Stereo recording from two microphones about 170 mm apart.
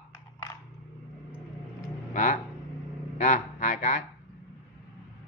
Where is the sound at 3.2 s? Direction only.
45° left (ahead or behind).